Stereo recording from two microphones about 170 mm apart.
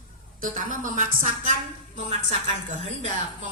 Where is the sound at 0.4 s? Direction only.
50° right (ahead or behind).